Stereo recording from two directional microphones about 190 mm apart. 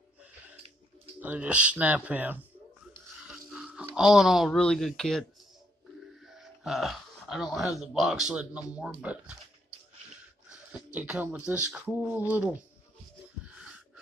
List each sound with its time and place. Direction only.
1.2 s speech: 10° right (ahead or behind)
3.3 s music: 5° right (ahead or behind)
3.9 s speech: centre (ahead or behind)
6.2 s speech: centre (ahead or behind)
10.5 s speech: 5° right (ahead or behind)